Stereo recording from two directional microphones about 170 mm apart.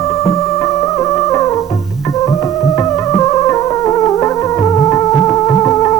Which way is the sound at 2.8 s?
20° left (ahead or behind).